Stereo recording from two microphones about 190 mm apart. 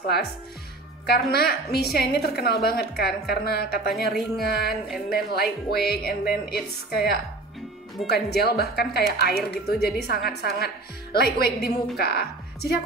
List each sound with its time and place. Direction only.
0.1 s a woman's voice: 60° left (ahead or behind)